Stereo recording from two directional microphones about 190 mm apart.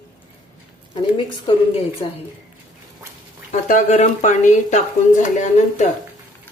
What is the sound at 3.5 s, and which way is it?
Speech, 40° left (ahead or behind).